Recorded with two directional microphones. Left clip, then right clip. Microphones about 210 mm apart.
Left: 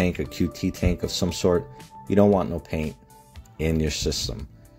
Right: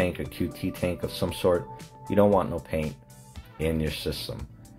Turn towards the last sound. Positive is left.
turn(degrees=45)  # may be behind; listen again after turning